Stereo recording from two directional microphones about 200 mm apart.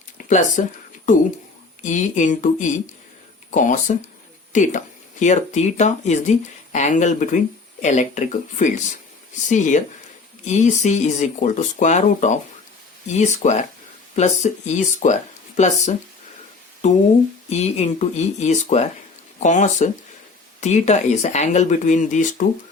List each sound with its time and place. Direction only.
0.2 s speech: 40° left (ahead or behind)
1.8 s speech: 40° left (ahead or behind)